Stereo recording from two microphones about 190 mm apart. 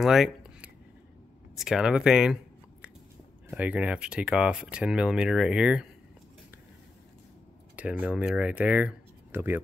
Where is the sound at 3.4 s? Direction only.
10° right (ahead or behind).